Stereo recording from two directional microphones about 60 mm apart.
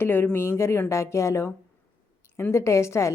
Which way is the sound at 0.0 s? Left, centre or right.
Left.